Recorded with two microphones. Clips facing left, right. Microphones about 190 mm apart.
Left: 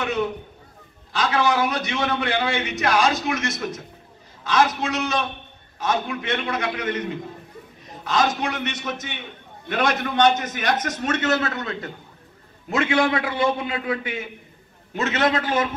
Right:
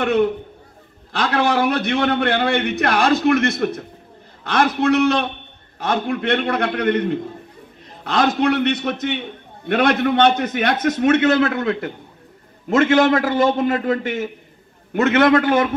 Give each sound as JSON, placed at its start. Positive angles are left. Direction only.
{"t": 0.0, "sound": "a man's voice", "side_deg": -55}